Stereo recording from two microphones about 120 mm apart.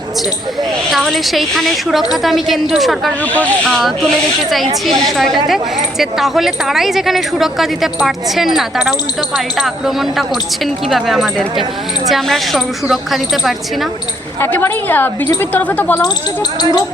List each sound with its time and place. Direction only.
0.9 s speech: centre (ahead or behind)
14.4 s a woman's voice: 20° left (ahead or behind)